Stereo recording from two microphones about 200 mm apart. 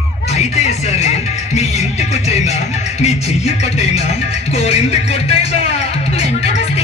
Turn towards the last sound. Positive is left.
turn(degrees=30)  # may be behind; listen again after turning